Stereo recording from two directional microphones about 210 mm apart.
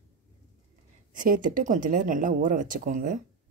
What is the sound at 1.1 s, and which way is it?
Speech, 40° right (ahead or behind).